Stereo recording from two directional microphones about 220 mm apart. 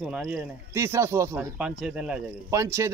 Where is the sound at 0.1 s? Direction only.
10° right (ahead or behind).